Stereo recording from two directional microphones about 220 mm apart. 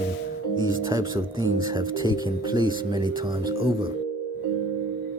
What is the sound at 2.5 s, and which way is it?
Speech, 20° right (ahead or behind).